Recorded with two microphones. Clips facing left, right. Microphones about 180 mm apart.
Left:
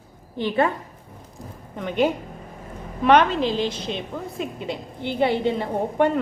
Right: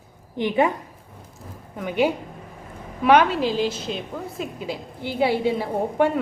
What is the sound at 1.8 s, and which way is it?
A woman's voice, 10° right (ahead or behind).